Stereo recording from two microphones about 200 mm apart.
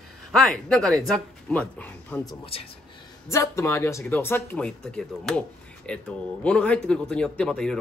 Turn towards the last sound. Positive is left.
turn(degrees=5)  # may be behind; listen again after turning